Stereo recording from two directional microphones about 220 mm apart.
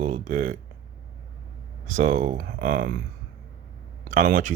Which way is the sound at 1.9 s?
35° right (ahead or behind).